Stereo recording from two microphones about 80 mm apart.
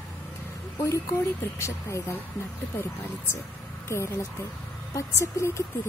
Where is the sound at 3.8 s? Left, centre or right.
Left.